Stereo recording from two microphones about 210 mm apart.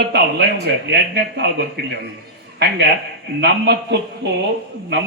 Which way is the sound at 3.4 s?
50° right (ahead or behind).